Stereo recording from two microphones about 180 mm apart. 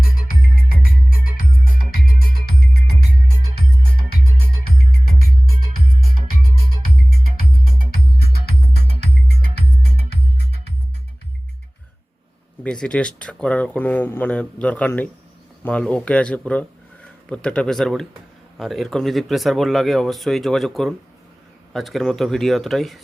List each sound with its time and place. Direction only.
0.2 s music: 55° left (ahead or behind)
7.8 s music: 55° left (ahead or behind)
12.6 s speech: 5° left (ahead or behind)